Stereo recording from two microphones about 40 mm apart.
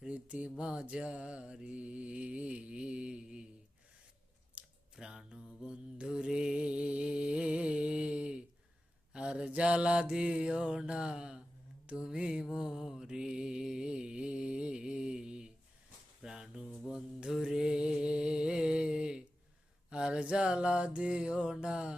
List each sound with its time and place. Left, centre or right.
0.1 s mantra: right
0.6 s music: right
0.9 s mantra: right
4.6 s a sound: right
4.9 s mantra: centre
13.1 s mantra: centre
16.2 s a sound: centre
17.5 s mantra: centre